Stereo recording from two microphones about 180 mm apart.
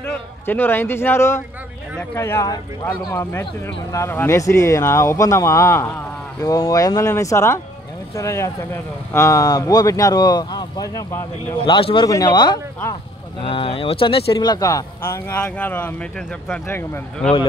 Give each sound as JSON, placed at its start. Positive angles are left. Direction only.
{"t": 0.1, "sound": "speech", "side_deg": 10}
{"t": 11.6, "sound": "speech", "side_deg": 30}